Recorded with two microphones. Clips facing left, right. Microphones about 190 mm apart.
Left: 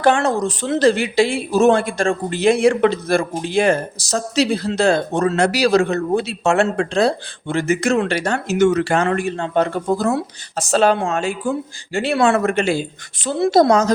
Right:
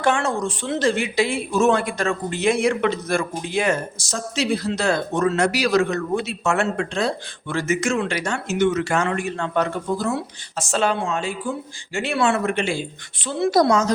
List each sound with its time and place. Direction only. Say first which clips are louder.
0.0 s speech: left 5 dB; 35° left (ahead or behind)
11.9 s speech: left 5 dB; 35° left (ahead or behind)
12.2 s speech: left 4 dB; 45° left (ahead or behind)
13.5 s a woman's voice: left 4 dB; 25° left (ahead or behind)